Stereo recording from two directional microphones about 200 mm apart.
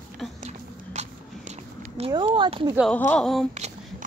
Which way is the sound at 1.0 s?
35° right (ahead or behind).